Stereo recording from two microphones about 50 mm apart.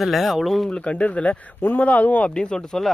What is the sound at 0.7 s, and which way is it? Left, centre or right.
Speech, left.